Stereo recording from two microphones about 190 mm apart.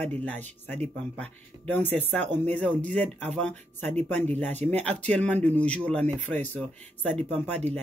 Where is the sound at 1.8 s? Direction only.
35° right (ahead or behind).